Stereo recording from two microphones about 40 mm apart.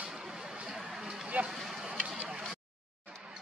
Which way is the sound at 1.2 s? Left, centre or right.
Right.